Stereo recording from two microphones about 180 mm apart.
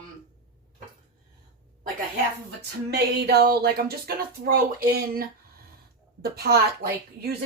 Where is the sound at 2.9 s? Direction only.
60° right (ahead or behind).